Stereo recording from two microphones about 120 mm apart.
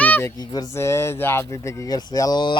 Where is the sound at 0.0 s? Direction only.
15° left (ahead or behind).